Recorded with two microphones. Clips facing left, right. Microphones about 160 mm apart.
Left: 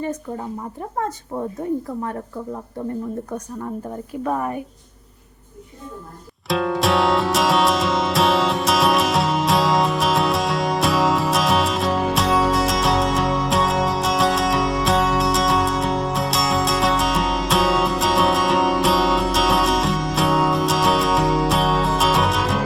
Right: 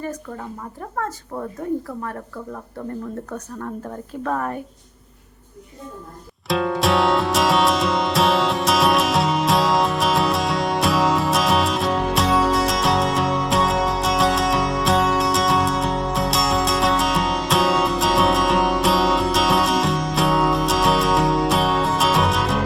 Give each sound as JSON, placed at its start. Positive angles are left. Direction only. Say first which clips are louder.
{"t": 0.0, "sound": "a woman's voice", "louder": "left 3 dB", "side_deg": 20}
{"t": 6.5, "sound": "music", "louder": "even", "side_deg": 0}